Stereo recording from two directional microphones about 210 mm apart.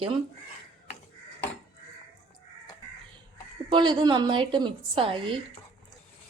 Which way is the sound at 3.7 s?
20° right (ahead or behind).